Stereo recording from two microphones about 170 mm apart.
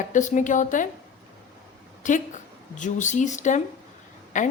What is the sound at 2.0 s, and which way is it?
A woman's voice, 50° left (ahead or behind).